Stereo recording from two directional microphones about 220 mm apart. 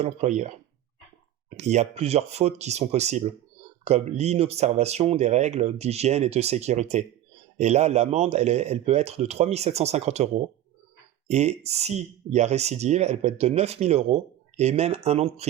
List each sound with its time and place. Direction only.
0.0 s speech: 30° right (ahead or behind)
1.5 s speech: 30° right (ahead or behind)